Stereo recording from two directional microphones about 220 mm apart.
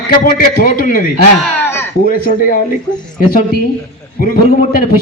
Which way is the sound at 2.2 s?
40° left (ahead or behind).